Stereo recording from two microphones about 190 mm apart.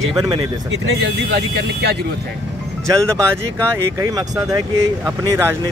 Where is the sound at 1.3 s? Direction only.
60° right (ahead or behind).